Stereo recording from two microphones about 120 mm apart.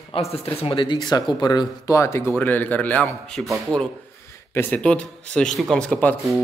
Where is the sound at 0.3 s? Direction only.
55° left (ahead or behind); by 2.0 s 35° left (ahead or behind).